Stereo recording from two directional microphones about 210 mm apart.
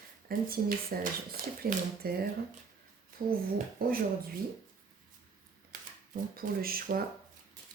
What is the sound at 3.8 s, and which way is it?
Speech, 45° right (ahead or behind).